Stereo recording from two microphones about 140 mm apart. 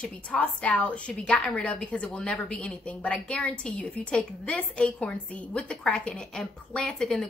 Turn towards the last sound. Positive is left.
turn(degrees=5)  # may be behind; listen again after turning